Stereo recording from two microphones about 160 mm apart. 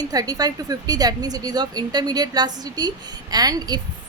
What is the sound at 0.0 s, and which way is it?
A woman's voice, 25° right (ahead or behind).